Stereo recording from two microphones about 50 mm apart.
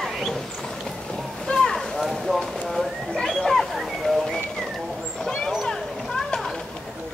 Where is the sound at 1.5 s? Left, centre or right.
Centre.